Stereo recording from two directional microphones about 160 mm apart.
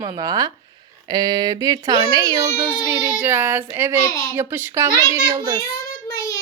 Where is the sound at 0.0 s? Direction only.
25° right (ahead or behind).